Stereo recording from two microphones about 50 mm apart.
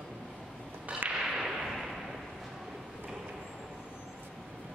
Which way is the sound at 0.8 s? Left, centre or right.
Right.